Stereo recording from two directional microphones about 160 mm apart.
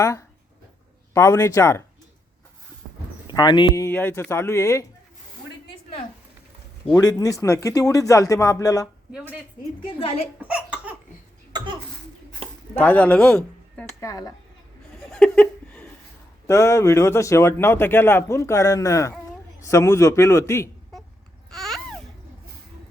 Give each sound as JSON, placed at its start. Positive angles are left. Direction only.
{"t": 0.0, "sound": "speech", "side_deg": 20}
{"t": 3.2, "sound": "speech", "side_deg": 25}
{"t": 3.8, "sound": "a man's voice", "side_deg": 15}
{"t": 6.9, "sound": "speech", "side_deg": 20}
{"t": 9.8, "sound": "a woman's voice", "side_deg": 35}
{"t": 10.5, "sound": "a sound", "side_deg": -10}
{"t": 11.5, "sound": "cough", "side_deg": -30}
{"t": 12.7, "sound": "speech", "side_deg": 10}
{"t": 14.0, "sound": "speech", "side_deg": 20}
{"t": 15.1, "sound": "a sound", "side_deg": 5}
{"t": 16.5, "sound": "a man's voice", "side_deg": 20}
{"t": 21.5, "sound": "babbling", "side_deg": 0}